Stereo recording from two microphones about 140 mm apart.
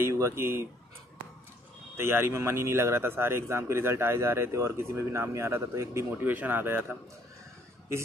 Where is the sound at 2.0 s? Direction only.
15° right (ahead or behind).